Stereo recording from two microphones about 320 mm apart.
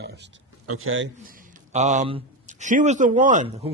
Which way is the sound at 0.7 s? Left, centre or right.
Right.